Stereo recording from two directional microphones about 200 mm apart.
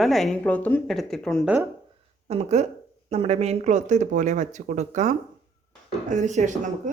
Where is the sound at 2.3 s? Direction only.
35° right (ahead or behind).